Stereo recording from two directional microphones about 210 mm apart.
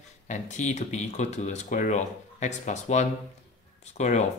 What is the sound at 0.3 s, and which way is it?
Speech, 35° left (ahead or behind).